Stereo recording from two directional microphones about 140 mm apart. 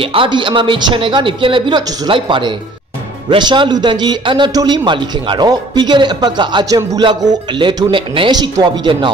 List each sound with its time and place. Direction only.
0.0 s a man's voice: 40° right (ahead or behind)